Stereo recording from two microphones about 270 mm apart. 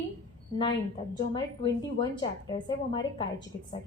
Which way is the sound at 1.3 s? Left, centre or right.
Centre.